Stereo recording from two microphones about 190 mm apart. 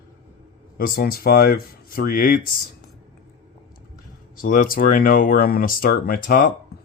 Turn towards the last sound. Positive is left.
turn(degrees=50)  # may be behind; listen again after turning